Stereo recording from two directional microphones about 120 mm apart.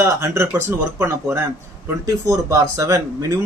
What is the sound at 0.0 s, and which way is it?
Speech, 25° right (ahead or behind).